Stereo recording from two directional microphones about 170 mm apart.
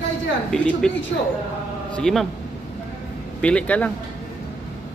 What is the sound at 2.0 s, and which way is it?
Speech, 5° left (ahead or behind).